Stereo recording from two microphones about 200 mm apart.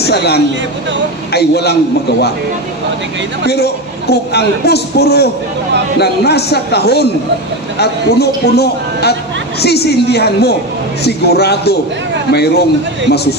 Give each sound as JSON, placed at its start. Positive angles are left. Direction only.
{"t": 0.0, "sound": "a man's voice", "side_deg": 55}
{"t": 3.4, "sound": "a man's voice", "side_deg": 55}